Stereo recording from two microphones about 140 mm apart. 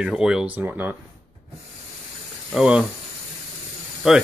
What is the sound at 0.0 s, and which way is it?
Speech, 5° right (ahead or behind).